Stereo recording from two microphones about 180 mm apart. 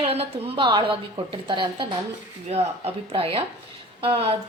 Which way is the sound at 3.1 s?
30° right (ahead or behind).